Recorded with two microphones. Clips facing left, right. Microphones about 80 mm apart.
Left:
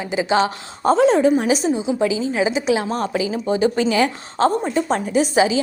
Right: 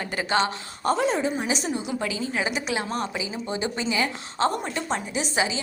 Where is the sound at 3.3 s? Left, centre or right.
Left.